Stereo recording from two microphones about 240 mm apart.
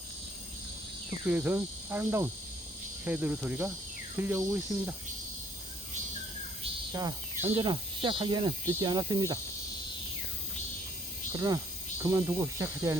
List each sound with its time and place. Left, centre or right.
1.3 s speech: centre
6.9 s speech: centre
11.3 s speech: centre